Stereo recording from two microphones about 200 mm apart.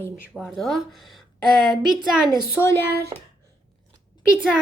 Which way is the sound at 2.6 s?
15° left (ahead or behind).